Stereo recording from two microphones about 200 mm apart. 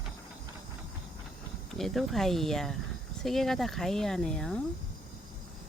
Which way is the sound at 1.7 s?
Centre (ahead or behind).